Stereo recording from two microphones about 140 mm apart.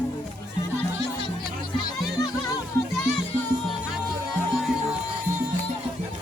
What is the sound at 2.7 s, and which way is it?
Music, 15° left (ahead or behind).